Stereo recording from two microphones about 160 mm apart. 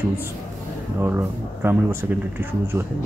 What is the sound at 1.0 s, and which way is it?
Speech, 15° right (ahead or behind).